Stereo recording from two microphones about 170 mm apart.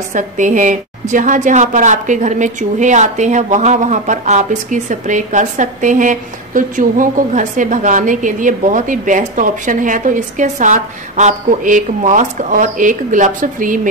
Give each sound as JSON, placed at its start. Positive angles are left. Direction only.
{"t": 0.1, "sound": "a woman's voice", "side_deg": -45}